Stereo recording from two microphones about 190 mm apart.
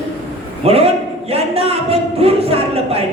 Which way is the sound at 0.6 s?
30° right (ahead or behind).